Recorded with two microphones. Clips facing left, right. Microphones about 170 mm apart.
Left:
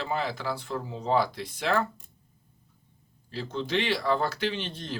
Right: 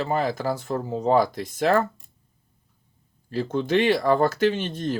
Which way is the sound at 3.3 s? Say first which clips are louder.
Right 7 dB; 50° right (ahead or behind).